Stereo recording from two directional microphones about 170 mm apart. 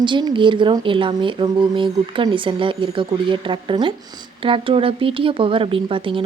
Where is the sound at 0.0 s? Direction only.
25° right (ahead or behind).